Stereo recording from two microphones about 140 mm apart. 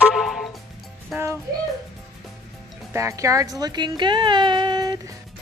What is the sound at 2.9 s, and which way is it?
Speech, 20° right (ahead or behind).